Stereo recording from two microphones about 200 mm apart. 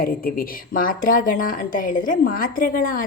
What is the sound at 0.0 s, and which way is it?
Speech, 45° left (ahead or behind).